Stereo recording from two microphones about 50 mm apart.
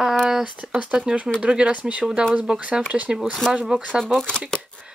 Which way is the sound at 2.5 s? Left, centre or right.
Centre.